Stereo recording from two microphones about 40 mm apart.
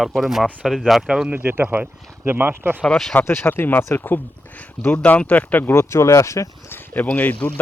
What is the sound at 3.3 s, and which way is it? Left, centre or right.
Speech, left.